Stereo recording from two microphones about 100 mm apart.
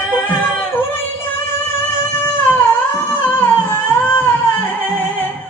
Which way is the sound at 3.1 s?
20° left (ahead or behind).